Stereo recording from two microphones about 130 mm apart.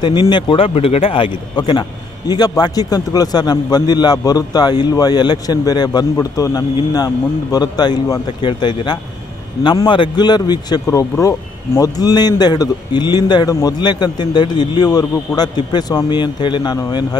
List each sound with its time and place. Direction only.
0.0 s a man's voice: 35° left (ahead or behind)